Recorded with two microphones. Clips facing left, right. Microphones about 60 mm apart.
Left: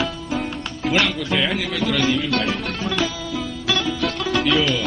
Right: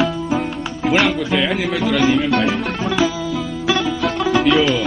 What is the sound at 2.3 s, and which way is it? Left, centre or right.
Music, centre.